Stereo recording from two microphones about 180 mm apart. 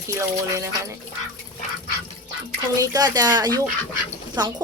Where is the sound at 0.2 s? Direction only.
15° right (ahead or behind).